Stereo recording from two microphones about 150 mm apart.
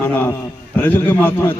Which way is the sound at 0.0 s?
15° left (ahead or behind).